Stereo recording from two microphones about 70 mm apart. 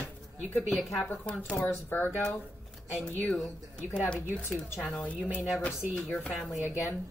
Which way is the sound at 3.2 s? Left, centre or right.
Centre.